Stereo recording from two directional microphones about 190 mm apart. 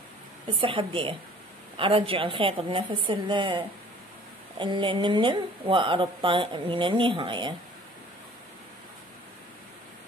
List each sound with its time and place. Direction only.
0.6 s speech: 30° right (ahead or behind)